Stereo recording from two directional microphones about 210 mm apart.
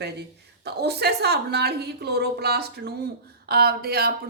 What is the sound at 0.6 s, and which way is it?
Speech, 50° right (ahead or behind).